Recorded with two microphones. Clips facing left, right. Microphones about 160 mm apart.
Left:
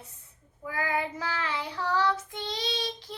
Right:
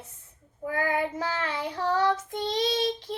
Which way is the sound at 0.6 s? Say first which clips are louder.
Right 4 dB; 50° right (ahead or behind).